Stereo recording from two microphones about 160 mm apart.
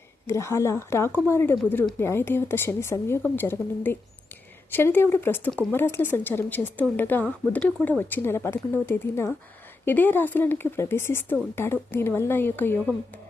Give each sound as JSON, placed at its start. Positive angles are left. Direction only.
{"t": 0.3, "sound": "speech", "side_deg": 15}